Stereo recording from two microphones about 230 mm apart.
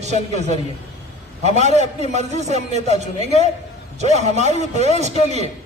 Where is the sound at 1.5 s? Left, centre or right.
Right.